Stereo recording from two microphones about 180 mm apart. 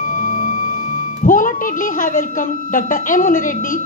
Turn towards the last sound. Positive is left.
turn(degrees=45)  # may be behind; listen again after turning